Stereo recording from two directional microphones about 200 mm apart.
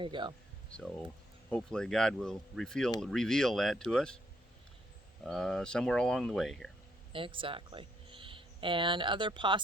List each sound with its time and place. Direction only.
0.0 s speech: 25° right (ahead or behind)
0.7 s speech: 5° left (ahead or behind)
5.2 s speech: 5° left (ahead or behind)
7.1 s speech: 25° right (ahead or behind)